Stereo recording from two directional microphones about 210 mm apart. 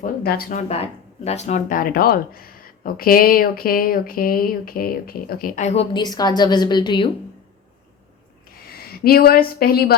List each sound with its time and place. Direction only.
0.0 s speech: 45° left (ahead or behind)
0.7 s speech: 30° left (ahead or behind)
8.9 s speech: 45° left (ahead or behind)